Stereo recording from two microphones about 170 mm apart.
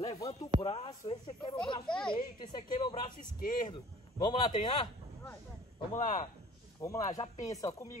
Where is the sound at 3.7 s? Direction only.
25° left (ahead or behind).